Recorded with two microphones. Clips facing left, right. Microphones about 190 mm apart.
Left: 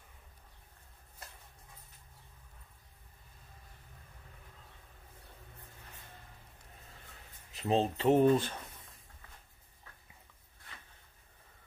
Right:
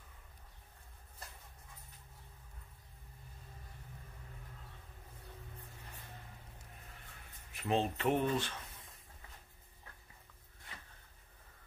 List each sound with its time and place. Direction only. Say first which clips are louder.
7.5 s speech: left 4 dB; 30° left (ahead or behind)